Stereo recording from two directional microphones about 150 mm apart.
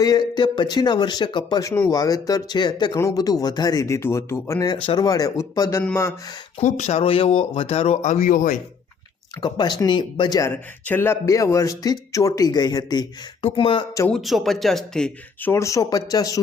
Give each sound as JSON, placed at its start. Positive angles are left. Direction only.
{"t": 0.0, "sound": "speech", "side_deg": 25}
{"t": 6.6, "sound": "speech", "side_deg": 50}
{"t": 9.4, "sound": "speech", "side_deg": 30}
{"t": 10.5, "sound": "speech", "side_deg": 10}
{"t": 14.1, "sound": "speech", "side_deg": 0}